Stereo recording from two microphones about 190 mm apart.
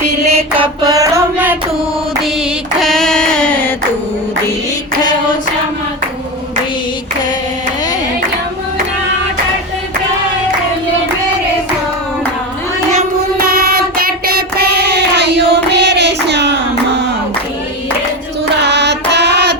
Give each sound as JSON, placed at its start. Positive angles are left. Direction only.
{"t": 0.3, "sound": "a sound", "side_deg": -30}
{"t": 2.8, "sound": "child singing", "side_deg": 0}
{"t": 13.7, "sound": "child singing", "side_deg": -50}
{"t": 18.6, "sound": "child singing", "side_deg": -65}